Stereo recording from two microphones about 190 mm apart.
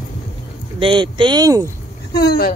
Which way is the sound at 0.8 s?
25° right (ahead or behind).